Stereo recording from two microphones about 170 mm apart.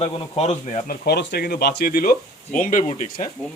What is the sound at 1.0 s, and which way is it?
Speech, 75° left (ahead or behind).